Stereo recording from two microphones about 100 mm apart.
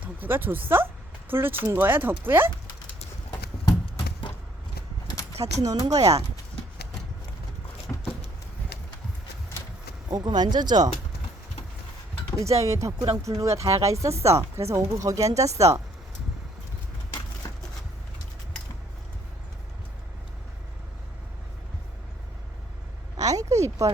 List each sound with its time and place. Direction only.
0.0 s speech: 20° right (ahead or behind)
5.3 s speech: 90° right
5.6 s speech: 40° right (ahead or behind)
7.9 s a sound: 15° left (ahead or behind)
10.1 s speech: 40° right (ahead or behind)
12.4 s speech: 30° right (ahead or behind)
23.1 s a sound: 35° right (ahead or behind)